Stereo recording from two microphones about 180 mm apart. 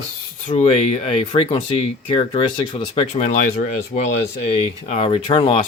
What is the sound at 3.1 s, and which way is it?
Speech, 40° left (ahead or behind).